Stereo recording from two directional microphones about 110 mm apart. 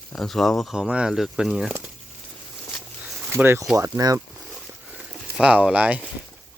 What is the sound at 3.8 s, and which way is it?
Speech, 30° right (ahead or behind).